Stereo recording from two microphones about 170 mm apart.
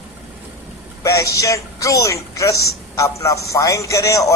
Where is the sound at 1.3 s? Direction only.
20° left (ahead or behind).